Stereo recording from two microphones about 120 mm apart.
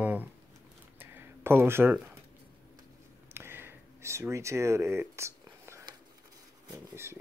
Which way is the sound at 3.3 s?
20° right (ahead or behind).